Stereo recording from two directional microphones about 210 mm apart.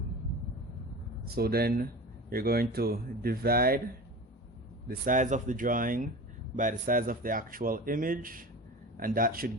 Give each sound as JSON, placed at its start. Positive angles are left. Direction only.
{"t": 1.4, "sound": "speech", "side_deg": -45}
{"t": 4.9, "sound": "speech", "side_deg": -40}